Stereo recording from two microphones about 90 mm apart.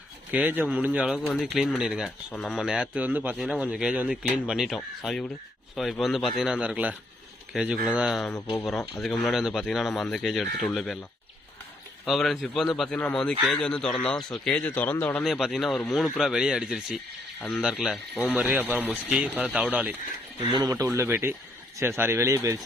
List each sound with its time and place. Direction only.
0.3 s speech: 15° right (ahead or behind)
3.3 s speech: 5° right (ahead or behind)
12.0 s speech: centre (ahead or behind); by 15.2 s 20° left (ahead or behind)
15.2 s speech: 5° right (ahead or behind)
19.4 s speech: 15° right (ahead or behind)
20.5 s speech: 50° right (ahead or behind)